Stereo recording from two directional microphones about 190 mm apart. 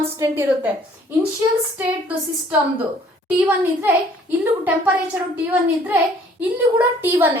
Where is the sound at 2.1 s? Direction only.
10° right (ahead or behind).